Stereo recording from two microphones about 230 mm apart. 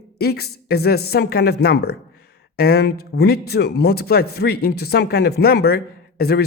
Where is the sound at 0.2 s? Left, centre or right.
Left.